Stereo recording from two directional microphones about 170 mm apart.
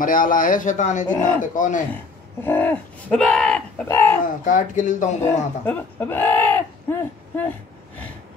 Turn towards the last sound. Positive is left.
turn(degrees=10)  # may be behind; listen again after turning